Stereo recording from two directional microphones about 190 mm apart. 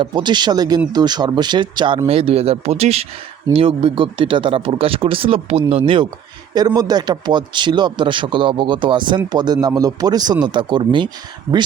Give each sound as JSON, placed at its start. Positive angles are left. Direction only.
{"t": 0.0, "sound": "a man's voice", "side_deg": -25}